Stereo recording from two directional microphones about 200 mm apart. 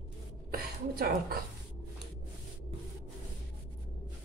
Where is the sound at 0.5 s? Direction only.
45° right (ahead or behind).